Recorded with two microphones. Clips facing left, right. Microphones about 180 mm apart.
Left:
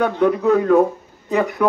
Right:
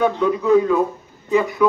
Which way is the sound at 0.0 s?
60° left (ahead or behind).